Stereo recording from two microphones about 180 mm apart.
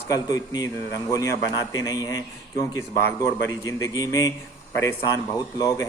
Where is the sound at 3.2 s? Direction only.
20° left (ahead or behind).